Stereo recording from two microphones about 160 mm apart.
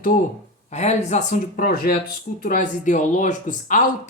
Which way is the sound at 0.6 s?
45° left (ahead or behind).